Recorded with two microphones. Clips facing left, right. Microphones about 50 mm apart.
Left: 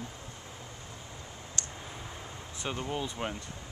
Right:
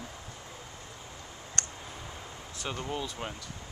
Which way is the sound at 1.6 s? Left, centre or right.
Right.